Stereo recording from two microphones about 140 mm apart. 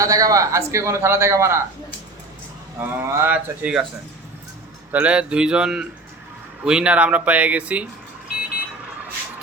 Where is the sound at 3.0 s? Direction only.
15° right (ahead or behind).